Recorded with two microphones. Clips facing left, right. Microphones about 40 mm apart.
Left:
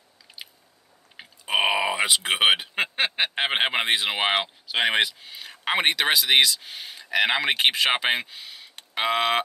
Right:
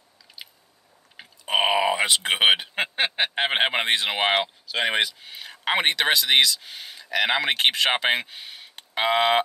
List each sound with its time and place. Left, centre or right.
1.4 s a sound: centre
4.6 s speech: centre
5.2 s speech: centre